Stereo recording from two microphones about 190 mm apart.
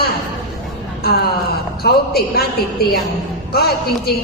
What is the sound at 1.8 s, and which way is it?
Speech, 55° left (ahead or behind).